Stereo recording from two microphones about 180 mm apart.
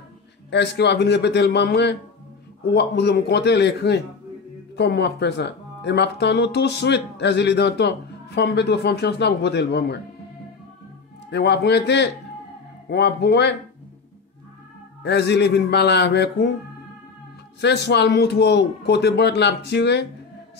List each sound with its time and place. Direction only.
0.5 s speech: 70° left (ahead or behind)
11.2 s speech: 70° left (ahead or behind)
15.0 s speech: 70° left (ahead or behind)
17.6 s speech: 70° left (ahead or behind)